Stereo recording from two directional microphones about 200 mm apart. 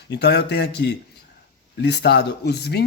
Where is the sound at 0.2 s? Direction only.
55° left (ahead or behind).